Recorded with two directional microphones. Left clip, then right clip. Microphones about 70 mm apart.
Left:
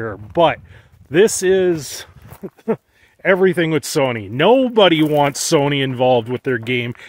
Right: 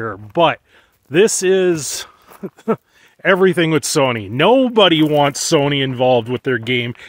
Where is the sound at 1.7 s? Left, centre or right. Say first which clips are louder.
Right 2 dB; right.